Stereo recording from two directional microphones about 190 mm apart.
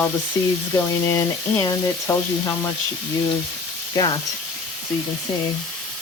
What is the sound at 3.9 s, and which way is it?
Speech, 20° left (ahead or behind).